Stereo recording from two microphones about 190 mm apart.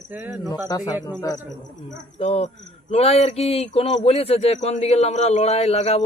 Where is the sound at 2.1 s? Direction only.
35° left (ahead or behind).